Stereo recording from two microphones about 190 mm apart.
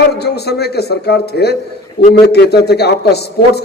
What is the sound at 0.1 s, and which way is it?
A man's voice, 60° left (ahead or behind).